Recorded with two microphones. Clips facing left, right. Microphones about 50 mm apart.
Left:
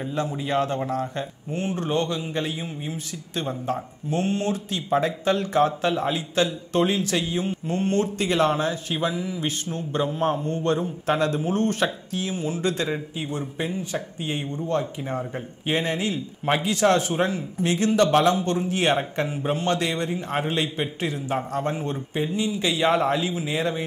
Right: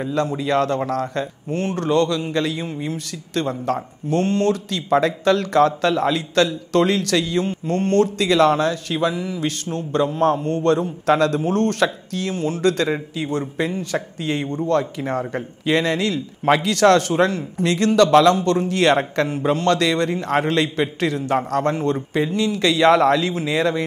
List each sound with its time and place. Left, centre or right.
0.0 s speech: right